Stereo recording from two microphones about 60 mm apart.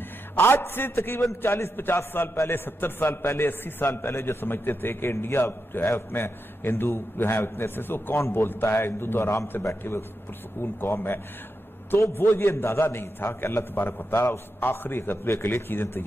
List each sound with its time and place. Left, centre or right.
0.4 s a man's voice: left
10.6 s a man's voice: left
14.1 s a man's voice: left
14.6 s a man's voice: left